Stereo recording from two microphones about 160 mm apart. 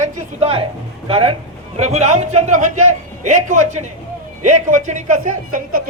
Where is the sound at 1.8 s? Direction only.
45° right (ahead or behind).